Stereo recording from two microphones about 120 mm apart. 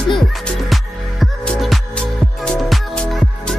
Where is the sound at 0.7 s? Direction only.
Centre (ahead or behind).